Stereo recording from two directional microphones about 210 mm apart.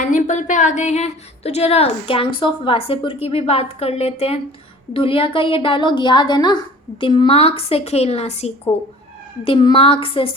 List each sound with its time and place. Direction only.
0.0 s speech: 35° left (ahead or behind)